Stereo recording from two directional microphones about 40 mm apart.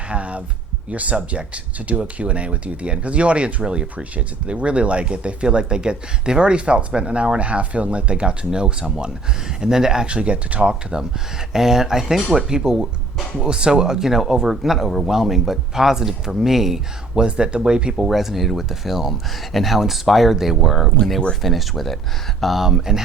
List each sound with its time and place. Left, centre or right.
0.1 s a sound: right
0.9 s speech: right; by 10.1 s centre
10.1 s speech: right
11.5 s speech: centre
17.2 s speech: right
17.9 s speech: centre
22.6 s speech: centre